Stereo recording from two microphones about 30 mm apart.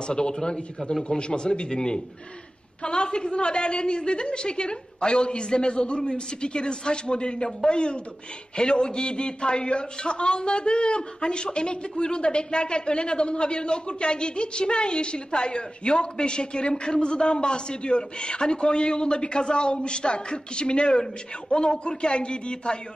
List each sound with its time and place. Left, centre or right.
0.0 s a man's voice: left